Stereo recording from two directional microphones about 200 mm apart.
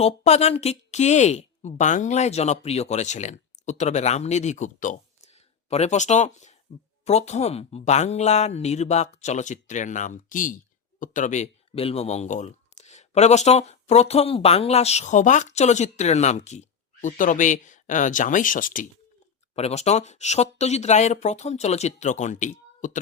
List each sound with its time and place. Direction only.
0.0 s speech: 30° left (ahead or behind)
19.5 s speech: 30° left (ahead or behind)